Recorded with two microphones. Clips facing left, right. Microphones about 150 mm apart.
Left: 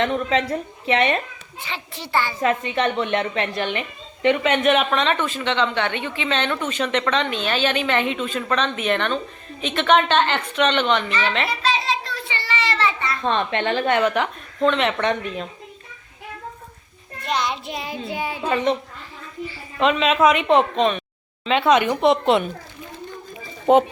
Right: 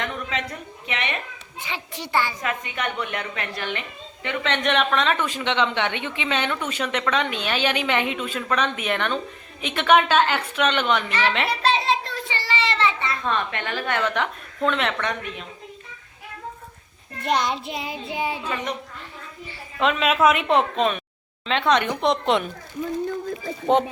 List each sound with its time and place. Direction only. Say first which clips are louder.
0.0 s a woman's voice: left 8 dB; 30° left (ahead or behind)
1.6 s a woman's voice: even; 15° right (ahead or behind)
2.4 s a woman's voice: left 7 dB; 30° left (ahead or behind)
4.4 s speech: even; 5° left (ahead or behind)
5.2 s a woman's voice: left 1 dB; 15° right (ahead or behind)
11.6 s child singing: right 1 dB; 60° right (ahead or behind)
12.5 s child singing: even; 30° right (ahead or behind)
13.2 s a woman's voice: left 7 dB; 25° left (ahead or behind)
14.6 s speech: left 4 dB; 5° right (ahead or behind)
14.9 s a woman's voice: left 6 dB; 30° left (ahead or behind)
17.2 s a child's voice: right 1 dB; 50° right (ahead or behind)
17.7 s child singing: left 2 dB; 20° right (ahead or behind)
18.4 s a woman's voice: left 8 dB; 30° left (ahead or behind)
19.8 s speech: left 2 dB; centre (ahead or behind)